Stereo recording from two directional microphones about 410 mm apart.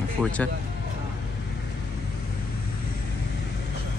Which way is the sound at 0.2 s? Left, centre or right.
Centre.